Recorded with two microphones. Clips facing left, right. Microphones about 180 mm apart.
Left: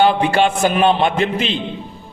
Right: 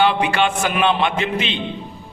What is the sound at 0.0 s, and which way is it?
Speech, 40° left (ahead or behind).